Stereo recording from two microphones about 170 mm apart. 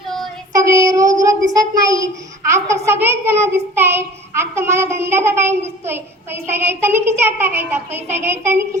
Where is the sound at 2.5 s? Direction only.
15° right (ahead or behind).